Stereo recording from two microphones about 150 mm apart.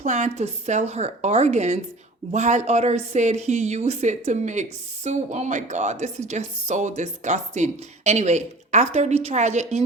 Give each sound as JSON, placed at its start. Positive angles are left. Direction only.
{"t": 0.0, "sound": "speech", "side_deg": -50}